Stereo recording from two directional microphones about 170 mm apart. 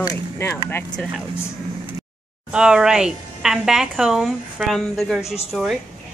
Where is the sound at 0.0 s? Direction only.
20° left (ahead or behind).